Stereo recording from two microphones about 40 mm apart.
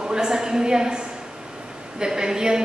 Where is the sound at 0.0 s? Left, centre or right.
Centre.